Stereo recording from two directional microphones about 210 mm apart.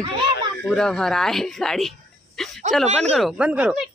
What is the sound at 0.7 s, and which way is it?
Speech, 5° left (ahead or behind).